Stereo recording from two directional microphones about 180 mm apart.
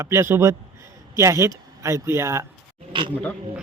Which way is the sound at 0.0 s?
15° right (ahead or behind).